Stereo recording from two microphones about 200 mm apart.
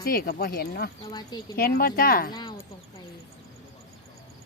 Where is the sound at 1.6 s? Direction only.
50° left (ahead or behind).